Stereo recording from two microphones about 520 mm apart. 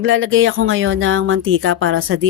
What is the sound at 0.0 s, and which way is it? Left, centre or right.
Speech, right.